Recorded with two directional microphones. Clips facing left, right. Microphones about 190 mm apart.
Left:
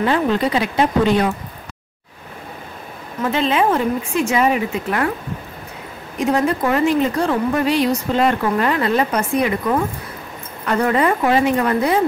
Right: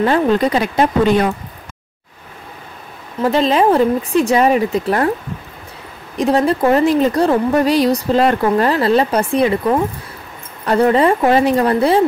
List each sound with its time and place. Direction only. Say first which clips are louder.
0.0 s speech: right 4 dB; 45° right (ahead or behind)
3.2 s speech: right 4 dB; 35° right (ahead or behind)
6.1 s speech: right 3 dB; 35° right (ahead or behind)